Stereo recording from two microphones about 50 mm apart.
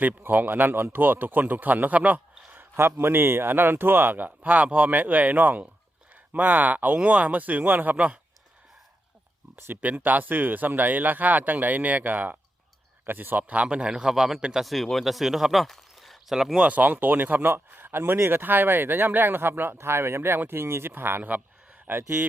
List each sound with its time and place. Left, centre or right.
0.2 s speech: right
2.0 s a sound: right
2.7 s speech: right
9.8 s speech: right
13.5 s a man's voice: right
13.9 s a man's voice: centre
15.6 s a sound: centre
16.3 s a man's voice: centre
16.6 s speech: right
21.2 s a sound: right